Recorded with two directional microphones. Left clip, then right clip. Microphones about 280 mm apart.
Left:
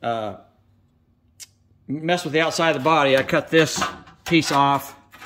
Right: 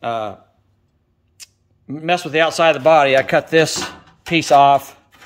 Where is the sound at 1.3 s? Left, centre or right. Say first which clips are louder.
Right 2 dB; centre.